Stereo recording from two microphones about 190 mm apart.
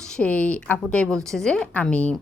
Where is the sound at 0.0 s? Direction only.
5° left (ahead or behind).